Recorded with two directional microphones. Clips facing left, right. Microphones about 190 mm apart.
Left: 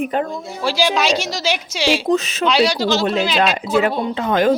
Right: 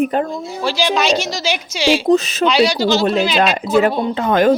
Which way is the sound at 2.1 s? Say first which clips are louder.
Right 4 dB; 35° right (ahead or behind).